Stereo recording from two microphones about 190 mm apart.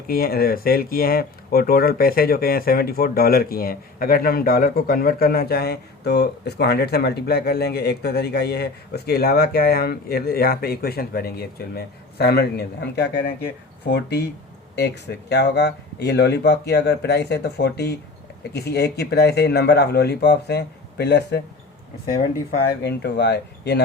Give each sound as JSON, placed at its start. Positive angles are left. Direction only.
{"t": 0.1, "sound": "speech", "side_deg": 50}
{"t": 22.8, "sound": "speech", "side_deg": 65}